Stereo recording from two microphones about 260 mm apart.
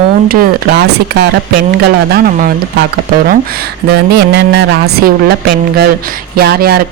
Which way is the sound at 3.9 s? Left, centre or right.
Right.